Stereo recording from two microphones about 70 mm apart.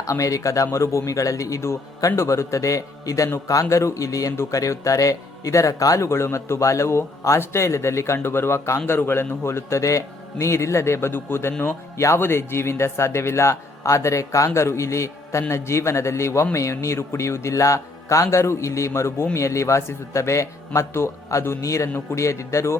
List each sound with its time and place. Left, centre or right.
0.0 s a man's voice: left